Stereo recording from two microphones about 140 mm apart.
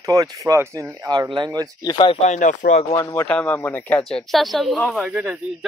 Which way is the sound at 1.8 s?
35° left (ahead or behind).